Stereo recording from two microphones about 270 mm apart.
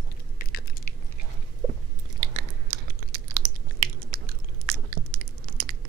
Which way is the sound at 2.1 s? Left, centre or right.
Right.